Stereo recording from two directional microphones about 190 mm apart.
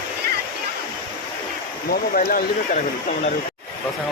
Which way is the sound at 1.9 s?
50° left (ahead or behind).